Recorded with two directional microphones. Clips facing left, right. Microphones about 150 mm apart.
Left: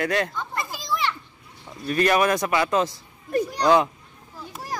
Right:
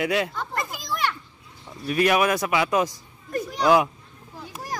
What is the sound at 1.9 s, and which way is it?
Speech, 5° right (ahead or behind).